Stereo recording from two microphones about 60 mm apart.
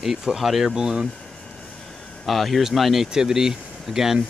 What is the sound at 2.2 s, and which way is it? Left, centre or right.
Speech, centre.